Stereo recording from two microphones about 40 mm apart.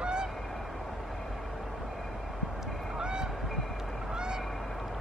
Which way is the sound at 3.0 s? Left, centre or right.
Right.